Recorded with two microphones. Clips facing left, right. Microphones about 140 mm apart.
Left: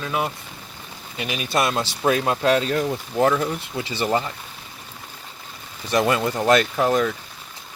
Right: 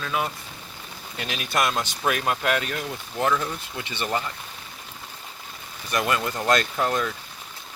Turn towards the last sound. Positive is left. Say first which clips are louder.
# left 5 dB
turn(degrees=20)  # may be behind; listen again after turning